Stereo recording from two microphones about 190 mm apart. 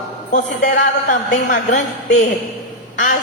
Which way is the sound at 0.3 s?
40° left (ahead or behind).